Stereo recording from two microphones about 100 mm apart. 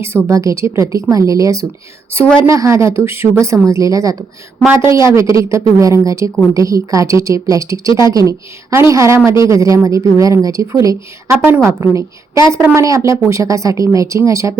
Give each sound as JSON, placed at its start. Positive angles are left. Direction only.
{"t": 0.3, "sound": "a woman's voice", "side_deg": -30}